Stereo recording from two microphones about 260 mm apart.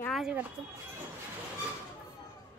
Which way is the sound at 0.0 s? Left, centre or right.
Centre.